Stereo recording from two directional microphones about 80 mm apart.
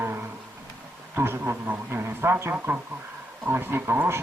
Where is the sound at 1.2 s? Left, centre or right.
Right.